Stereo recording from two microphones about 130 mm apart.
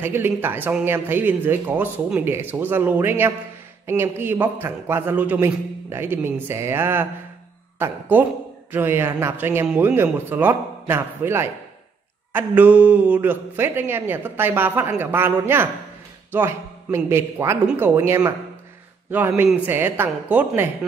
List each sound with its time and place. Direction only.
0.0 s a man's voice: 15° right (ahead or behind)